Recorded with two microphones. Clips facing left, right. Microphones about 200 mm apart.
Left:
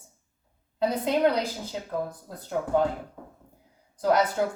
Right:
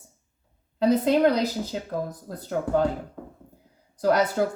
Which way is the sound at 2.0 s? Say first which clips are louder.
Right 4 dB; 40° right (ahead or behind).